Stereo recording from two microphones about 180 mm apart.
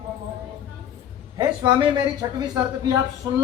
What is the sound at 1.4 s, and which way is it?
Speech, 25° right (ahead or behind).